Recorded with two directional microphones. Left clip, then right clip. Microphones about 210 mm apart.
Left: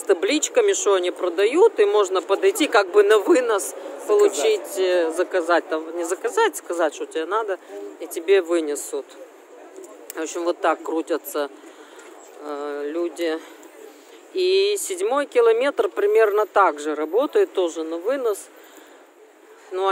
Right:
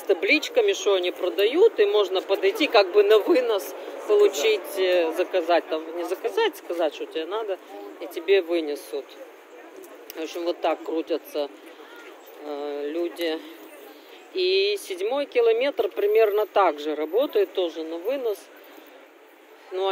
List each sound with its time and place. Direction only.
0.1 s speech: 20° left (ahead or behind)
10.1 s speech: 25° left (ahead or behind)
17.7 s speech: 25° left (ahead or behind)
19.7 s speech: 15° left (ahead or behind)